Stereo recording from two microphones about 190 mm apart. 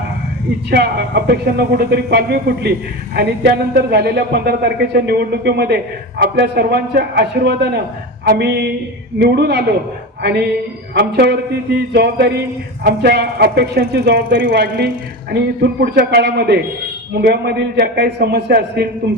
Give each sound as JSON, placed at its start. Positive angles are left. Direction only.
{"t": 0.7, "sound": "a man's voice", "side_deg": -60}
{"t": 10.9, "sound": "a man's voice", "side_deg": -60}